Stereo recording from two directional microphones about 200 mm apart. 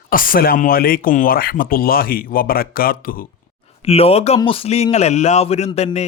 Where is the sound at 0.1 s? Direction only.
45° left (ahead or behind).